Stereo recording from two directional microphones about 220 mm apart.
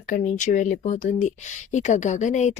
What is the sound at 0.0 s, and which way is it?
Speech, 35° left (ahead or behind).